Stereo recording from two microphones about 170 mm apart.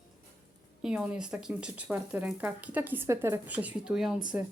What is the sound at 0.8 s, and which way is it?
Speech, 5° right (ahead or behind).